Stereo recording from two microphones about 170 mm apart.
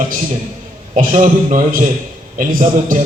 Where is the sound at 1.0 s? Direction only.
50° right (ahead or behind).